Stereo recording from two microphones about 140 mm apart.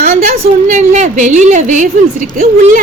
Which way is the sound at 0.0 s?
60° right (ahead or behind).